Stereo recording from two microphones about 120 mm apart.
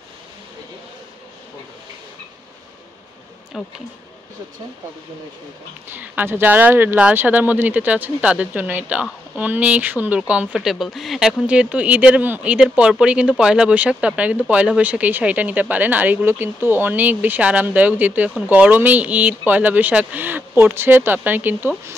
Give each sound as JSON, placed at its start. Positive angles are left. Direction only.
{"t": 3.5, "sound": "speech", "side_deg": 0}
{"t": 5.9, "sound": "speech", "side_deg": -15}